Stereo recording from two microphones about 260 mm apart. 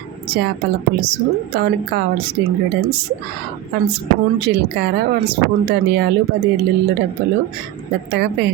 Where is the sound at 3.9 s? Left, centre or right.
Right.